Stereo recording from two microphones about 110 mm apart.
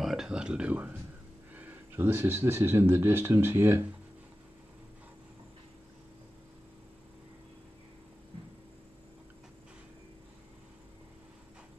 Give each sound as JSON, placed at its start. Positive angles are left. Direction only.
{"t": 0.0, "sound": "speech", "side_deg": -5}